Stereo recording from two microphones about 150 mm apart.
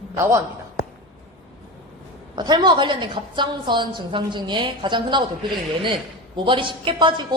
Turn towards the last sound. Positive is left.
turn(degrees=-35)  # may be behind; listen again after turning